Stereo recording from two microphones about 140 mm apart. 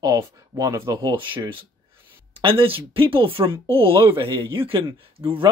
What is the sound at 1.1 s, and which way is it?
Speech, 35° right (ahead or behind).